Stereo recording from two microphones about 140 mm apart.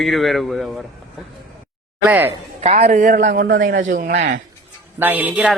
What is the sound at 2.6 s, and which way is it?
A man's voice, 50° right (ahead or behind).